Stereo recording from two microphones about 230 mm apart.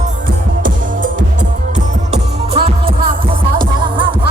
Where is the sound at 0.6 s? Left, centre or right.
Right.